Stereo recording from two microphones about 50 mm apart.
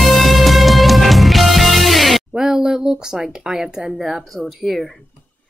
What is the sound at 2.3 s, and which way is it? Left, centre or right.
Speech, centre.